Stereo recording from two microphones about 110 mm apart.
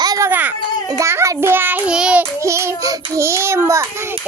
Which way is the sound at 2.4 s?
25° right (ahead or behind).